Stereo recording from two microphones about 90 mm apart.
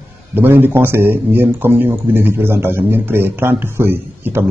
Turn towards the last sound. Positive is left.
turn(degrees=-25)  # may be behind; listen again after turning